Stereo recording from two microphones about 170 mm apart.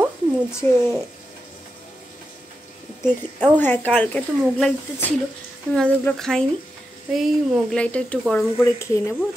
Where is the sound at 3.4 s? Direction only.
10° left (ahead or behind).